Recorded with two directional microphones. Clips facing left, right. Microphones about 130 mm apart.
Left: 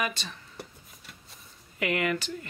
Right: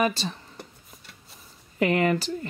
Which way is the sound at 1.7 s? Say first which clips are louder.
Right 6 dB; 35° right (ahead or behind).